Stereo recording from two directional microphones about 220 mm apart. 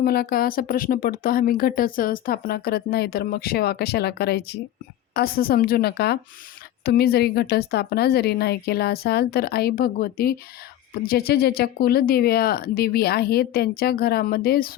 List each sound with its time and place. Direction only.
0.0 s speech: 45° left (ahead or behind)